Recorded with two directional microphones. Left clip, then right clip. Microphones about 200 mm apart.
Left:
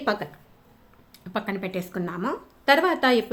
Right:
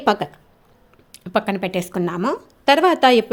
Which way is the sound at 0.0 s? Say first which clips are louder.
Right 8 dB; 35° right (ahead or behind).